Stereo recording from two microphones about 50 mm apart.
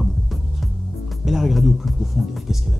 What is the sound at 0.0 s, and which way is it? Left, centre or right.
Music, centre.